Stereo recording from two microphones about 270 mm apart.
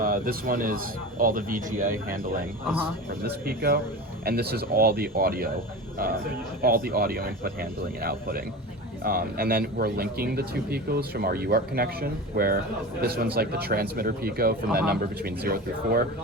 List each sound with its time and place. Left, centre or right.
0.0 s speech: right
3.2 s speech: right
6.6 s speech: right